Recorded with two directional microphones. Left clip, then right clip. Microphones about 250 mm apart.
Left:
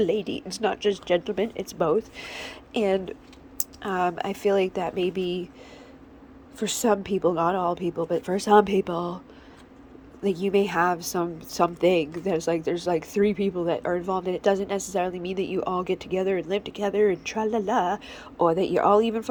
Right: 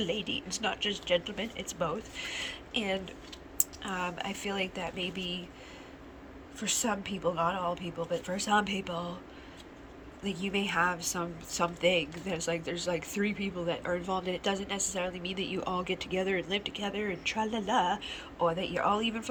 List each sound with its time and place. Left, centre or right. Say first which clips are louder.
0.0 s a woman's voice: left 9 dB; left
0.3 s speech: left 3 dB; left
0.6 s a woman's voice: left 10 dB; left
6.6 s a woman's voice: left 9 dB; left
10.2 s a woman's voice: left 10 dB; left